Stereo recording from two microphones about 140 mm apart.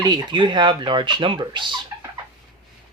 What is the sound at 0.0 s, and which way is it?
Speech, 30° right (ahead or behind).